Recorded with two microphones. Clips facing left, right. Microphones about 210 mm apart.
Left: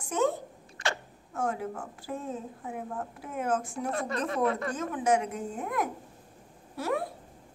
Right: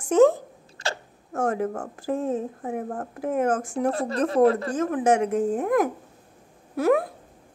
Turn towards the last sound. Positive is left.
turn(degrees=-50)  # may be behind; listen again after turning